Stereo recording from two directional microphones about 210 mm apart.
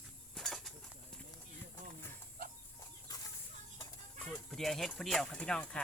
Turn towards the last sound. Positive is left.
turn(degrees=5)  # may be behind; listen again after turning